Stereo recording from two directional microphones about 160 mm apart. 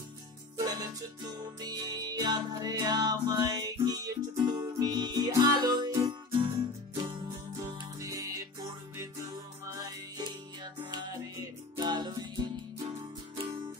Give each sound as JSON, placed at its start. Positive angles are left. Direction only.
{"t": 0.6, "sound": "music", "side_deg": -25}
{"t": 7.6, "sound": "music", "side_deg": -20}
{"t": 10.1, "sound": "music", "side_deg": -25}